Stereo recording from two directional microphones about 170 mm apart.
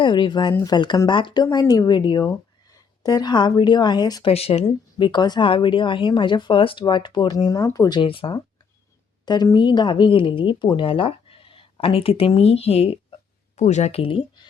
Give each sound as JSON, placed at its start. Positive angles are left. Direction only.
{"t": 0.0, "sound": "a woman's voice", "side_deg": 30}